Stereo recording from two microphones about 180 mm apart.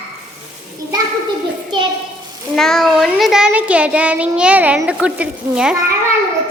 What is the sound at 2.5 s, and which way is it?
Child singing, centre (ahead or behind).